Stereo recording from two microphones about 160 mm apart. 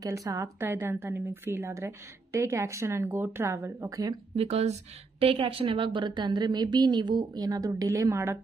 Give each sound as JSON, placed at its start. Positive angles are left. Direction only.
{"t": 0.0, "sound": "a woman's voice", "side_deg": -20}
{"t": 4.4, "sound": "a woman's voice", "side_deg": -40}